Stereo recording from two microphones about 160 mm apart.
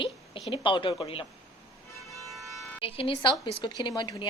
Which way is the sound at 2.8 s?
35° left (ahead or behind).